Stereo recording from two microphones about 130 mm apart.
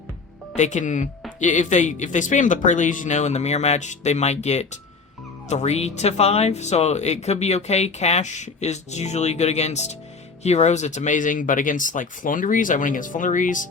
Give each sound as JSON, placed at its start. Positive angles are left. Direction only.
{"t": 0.5, "sound": "speech", "side_deg": 70}